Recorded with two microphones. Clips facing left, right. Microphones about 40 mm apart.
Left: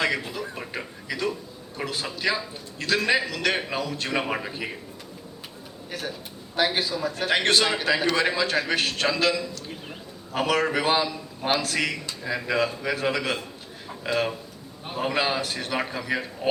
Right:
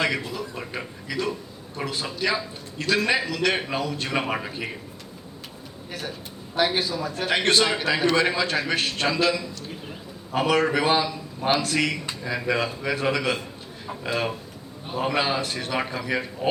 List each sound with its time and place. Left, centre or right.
0.0 s a sound: centre
1.8 s a man's voice: centre
5.9 s a man's voice: centre
9.0 s a man's voice: centre
10.3 s a man's voice: centre